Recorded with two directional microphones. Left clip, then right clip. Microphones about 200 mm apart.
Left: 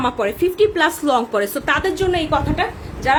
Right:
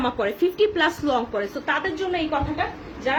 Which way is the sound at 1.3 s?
50° left (ahead or behind).